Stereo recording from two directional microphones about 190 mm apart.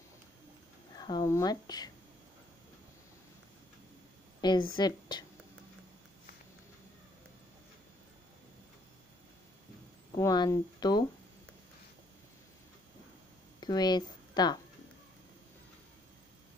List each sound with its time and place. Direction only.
0.9 s speech: 20° left (ahead or behind)
4.4 s a woman's voice: 20° left (ahead or behind)
10.1 s speech: 20° left (ahead or behind)
13.6 s speech: 20° left (ahead or behind)